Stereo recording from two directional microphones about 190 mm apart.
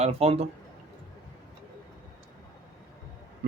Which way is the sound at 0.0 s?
30° right (ahead or behind).